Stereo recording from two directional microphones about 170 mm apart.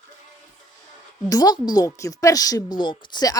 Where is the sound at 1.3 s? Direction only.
20° left (ahead or behind).